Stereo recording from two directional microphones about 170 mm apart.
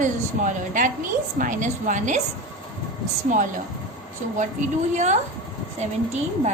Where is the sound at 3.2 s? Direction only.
50° right (ahead or behind).